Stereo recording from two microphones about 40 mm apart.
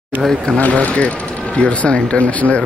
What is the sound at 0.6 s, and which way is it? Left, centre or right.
Speech, left.